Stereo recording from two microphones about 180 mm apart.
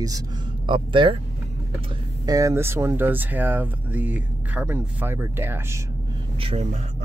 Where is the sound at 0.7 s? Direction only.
30° right (ahead or behind).